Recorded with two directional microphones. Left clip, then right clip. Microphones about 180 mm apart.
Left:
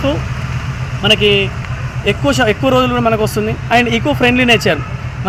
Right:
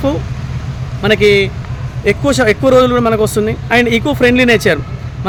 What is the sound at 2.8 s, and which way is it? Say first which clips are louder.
Speech: right 4 dB; 45° right (ahead or behind).